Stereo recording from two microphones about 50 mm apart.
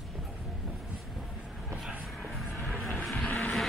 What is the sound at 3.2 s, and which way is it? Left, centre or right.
Vehicle, left.